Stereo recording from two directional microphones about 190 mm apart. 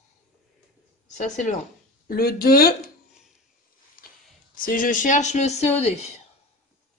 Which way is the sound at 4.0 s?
45° left (ahead or behind).